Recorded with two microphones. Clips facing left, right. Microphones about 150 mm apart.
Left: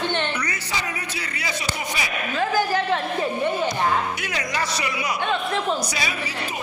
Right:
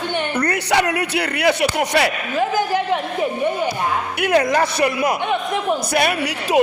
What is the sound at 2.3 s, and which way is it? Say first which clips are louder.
A man's voice: right 1 dB; 20° right (ahead or behind).